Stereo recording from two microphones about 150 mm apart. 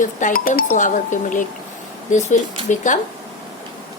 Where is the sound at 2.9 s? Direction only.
55° left (ahead or behind).